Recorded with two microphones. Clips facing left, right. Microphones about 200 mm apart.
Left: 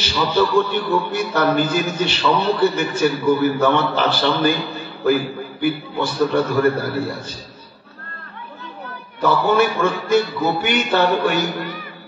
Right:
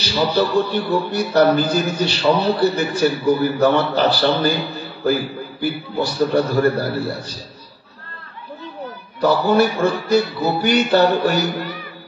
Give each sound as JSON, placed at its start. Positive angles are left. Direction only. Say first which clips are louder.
{"t": 0.0, "sound": "a man's voice", "louder": "even", "side_deg": -40}
{"t": 9.2, "sound": "a man's voice", "louder": "right 1 dB", "side_deg": -35}